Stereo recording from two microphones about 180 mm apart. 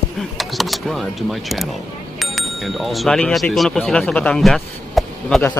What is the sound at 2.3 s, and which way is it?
Speech, centre (ahead or behind).